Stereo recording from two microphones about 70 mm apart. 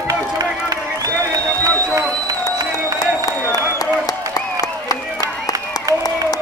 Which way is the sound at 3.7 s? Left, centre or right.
Left.